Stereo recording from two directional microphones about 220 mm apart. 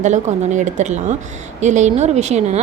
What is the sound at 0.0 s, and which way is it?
A woman's voice, 35° right (ahead or behind).